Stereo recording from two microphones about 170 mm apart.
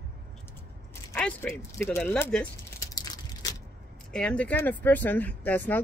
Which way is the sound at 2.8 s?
20° left (ahead or behind).